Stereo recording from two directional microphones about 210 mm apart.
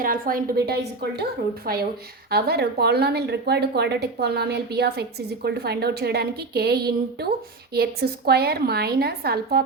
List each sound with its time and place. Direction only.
0.0 s speech: 45° right (ahead or behind)